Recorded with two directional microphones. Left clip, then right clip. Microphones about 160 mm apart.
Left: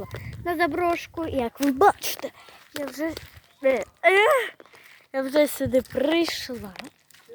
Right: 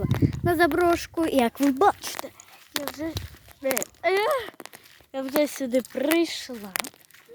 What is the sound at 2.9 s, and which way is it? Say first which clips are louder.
Speech: left 3 dB; 35° left (ahead or behind).